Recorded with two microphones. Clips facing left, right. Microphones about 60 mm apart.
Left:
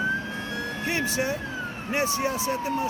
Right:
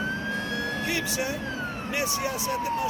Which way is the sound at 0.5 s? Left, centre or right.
Left.